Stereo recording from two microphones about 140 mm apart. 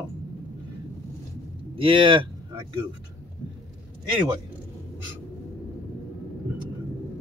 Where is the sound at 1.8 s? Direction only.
40° right (ahead or behind).